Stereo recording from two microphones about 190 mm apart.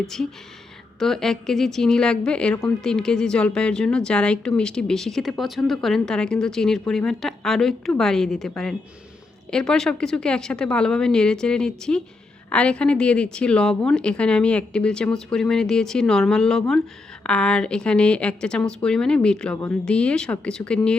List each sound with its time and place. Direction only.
0.0 s a woman's voice: centre (ahead or behind)